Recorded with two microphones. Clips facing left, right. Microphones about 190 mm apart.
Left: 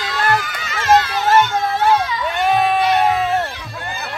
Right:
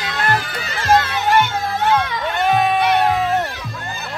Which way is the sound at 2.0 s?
60° right (ahead or behind).